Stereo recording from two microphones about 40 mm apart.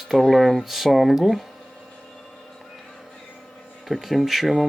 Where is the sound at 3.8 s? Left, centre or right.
Centre.